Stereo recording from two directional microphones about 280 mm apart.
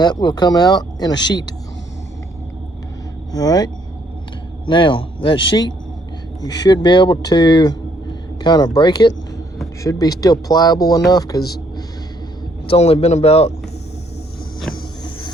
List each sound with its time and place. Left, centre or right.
0.0 s speech: centre
3.3 s speech: centre
4.7 s speech: centre
12.6 s speech: left